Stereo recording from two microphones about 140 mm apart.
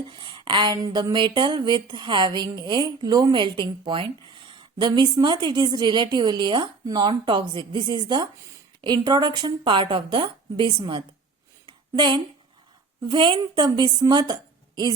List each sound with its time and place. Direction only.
0.1 s speech: 35° right (ahead or behind)
11.6 s a sound: 35° right (ahead or behind)
13.1 s speech: 35° right (ahead or behind)